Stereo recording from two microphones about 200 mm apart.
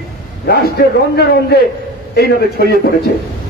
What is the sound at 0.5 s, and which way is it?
A man's voice, 50° left (ahead or behind).